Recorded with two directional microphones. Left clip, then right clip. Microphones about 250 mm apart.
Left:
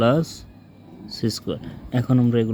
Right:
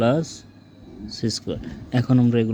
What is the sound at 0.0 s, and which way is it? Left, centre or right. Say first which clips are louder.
Speech: left 1 dB; centre.